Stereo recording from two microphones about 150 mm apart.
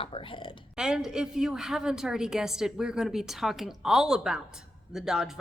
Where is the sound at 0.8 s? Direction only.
5° right (ahead or behind).